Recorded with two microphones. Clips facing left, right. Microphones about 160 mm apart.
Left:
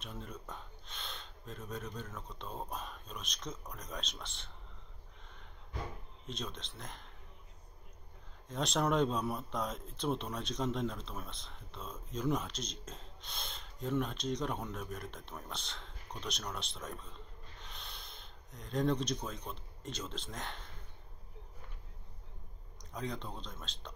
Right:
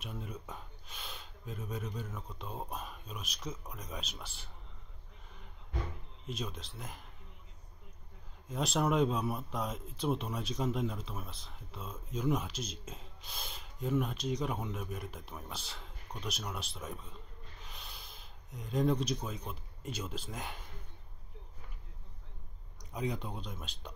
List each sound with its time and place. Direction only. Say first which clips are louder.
0.0 s speech: right 2 dB; 5° right (ahead or behind)
6.2 s speech: right 2 dB; 5° right (ahead or behind)
8.5 s speech: right 1 dB; 5° right (ahead or behind)
22.8 s speech: right 4 dB; 10° right (ahead or behind)